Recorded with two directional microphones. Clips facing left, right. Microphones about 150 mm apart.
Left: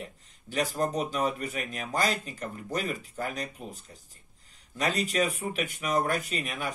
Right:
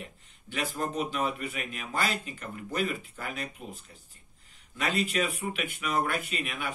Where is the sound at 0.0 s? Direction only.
40° left (ahead or behind).